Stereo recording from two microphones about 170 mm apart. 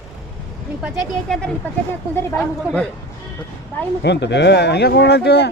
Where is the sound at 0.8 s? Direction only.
Centre (ahead or behind).